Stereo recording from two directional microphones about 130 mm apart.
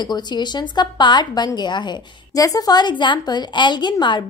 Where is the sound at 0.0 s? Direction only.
35° left (ahead or behind).